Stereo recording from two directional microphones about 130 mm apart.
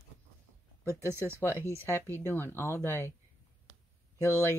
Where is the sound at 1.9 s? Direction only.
15° left (ahead or behind).